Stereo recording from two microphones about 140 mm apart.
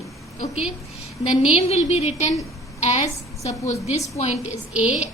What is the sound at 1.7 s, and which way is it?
A woman's voice, 50° left (ahead or behind).